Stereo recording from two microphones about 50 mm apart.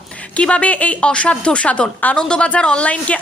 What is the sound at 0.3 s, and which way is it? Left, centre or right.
A woman's voice, left.